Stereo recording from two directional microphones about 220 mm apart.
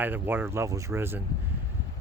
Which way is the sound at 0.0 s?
10° right (ahead or behind).